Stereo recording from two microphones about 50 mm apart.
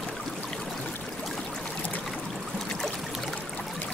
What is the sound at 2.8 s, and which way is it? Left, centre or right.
Trickle, centre.